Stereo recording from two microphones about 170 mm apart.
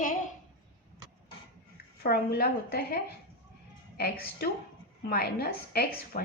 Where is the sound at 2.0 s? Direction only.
65° left (ahead or behind).